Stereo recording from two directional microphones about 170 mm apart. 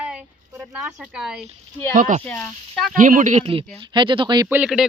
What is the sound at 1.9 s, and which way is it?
Speech, 50° right (ahead or behind).